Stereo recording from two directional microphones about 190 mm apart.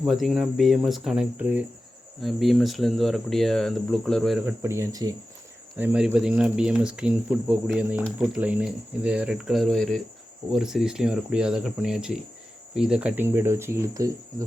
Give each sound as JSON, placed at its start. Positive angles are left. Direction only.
{"t": 0.0, "sound": "speech", "side_deg": 0}
{"t": 4.6, "sound": "speech", "side_deg": -15}
{"t": 5.7, "sound": "speech", "side_deg": -5}